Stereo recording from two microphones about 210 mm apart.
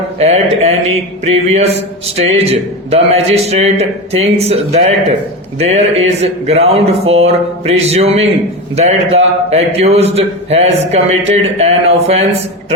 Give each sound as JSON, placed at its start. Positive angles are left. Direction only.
{"t": 0.2, "sound": "a man's voice", "side_deg": -30}